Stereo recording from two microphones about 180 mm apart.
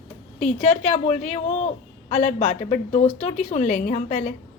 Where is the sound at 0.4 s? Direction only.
35° left (ahead or behind).